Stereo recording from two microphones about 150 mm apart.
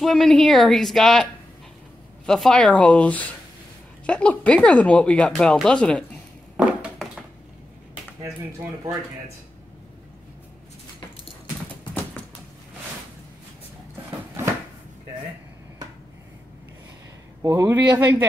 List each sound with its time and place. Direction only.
0.0 s speech: centre (ahead or behind)
2.2 s speech: centre (ahead or behind)
6.5 s a sound: 5° right (ahead or behind)
17.4 s speech: 20° right (ahead or behind)